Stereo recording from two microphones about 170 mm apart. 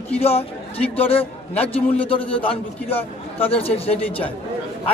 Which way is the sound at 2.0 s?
30° left (ahead or behind).